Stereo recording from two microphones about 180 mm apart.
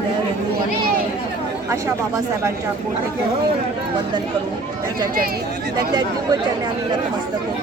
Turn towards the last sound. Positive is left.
turn(degrees=-25)  # may be behind; listen again after turning